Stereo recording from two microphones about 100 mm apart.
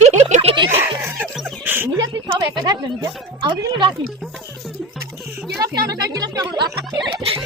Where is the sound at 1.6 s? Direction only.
20° right (ahead or behind).